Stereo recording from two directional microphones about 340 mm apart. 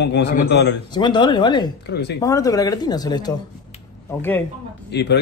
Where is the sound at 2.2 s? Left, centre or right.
Centre.